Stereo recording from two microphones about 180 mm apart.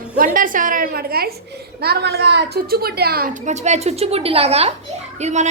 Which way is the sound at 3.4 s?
40° right (ahead or behind).